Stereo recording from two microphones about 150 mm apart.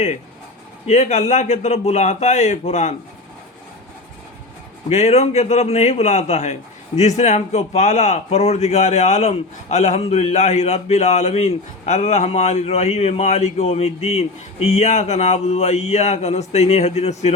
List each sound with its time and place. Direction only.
0.9 s a man's voice: 50° left (ahead or behind)
4.9 s a man's voice: 45° left (ahead or behind)